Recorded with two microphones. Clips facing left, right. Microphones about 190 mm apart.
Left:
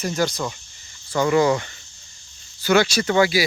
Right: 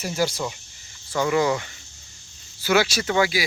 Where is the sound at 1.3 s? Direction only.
40° left (ahead or behind).